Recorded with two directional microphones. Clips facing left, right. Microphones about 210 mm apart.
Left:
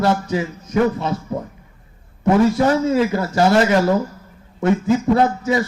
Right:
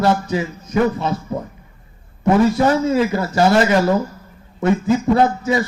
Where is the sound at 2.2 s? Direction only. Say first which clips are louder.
Even; 50° left (ahead or behind).